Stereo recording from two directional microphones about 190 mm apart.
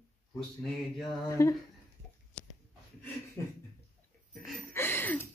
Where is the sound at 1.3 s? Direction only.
15° left (ahead or behind).